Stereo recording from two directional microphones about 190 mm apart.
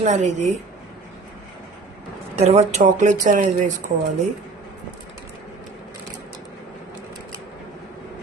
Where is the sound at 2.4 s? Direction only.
35° right (ahead or behind).